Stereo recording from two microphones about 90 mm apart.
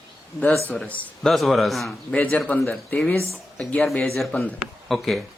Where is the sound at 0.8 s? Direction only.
15° left (ahead or behind).